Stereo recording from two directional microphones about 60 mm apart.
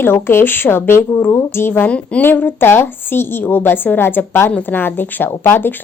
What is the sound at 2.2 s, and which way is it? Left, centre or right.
A woman's voice, left.